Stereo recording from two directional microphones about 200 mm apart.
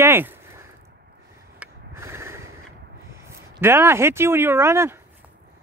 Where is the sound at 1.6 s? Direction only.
15° right (ahead or behind).